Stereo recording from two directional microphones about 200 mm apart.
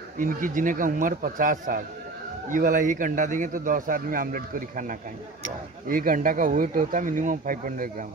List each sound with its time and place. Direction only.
0.2 s a man's voice: 40° right (ahead or behind)